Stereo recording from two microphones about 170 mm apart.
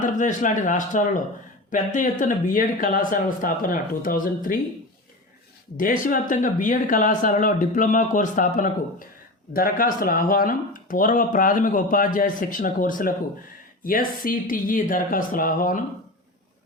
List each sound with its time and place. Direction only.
0.0 s speech: 50° left (ahead or behind)
5.7 s speech: 55° left (ahead or behind)